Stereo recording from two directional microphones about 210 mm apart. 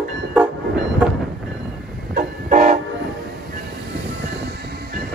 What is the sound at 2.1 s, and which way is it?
Vehicle, 35° right (ahead or behind).